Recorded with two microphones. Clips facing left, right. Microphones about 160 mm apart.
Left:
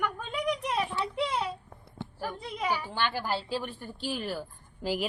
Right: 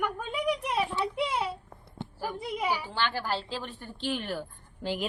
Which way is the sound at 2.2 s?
10° right (ahead or behind).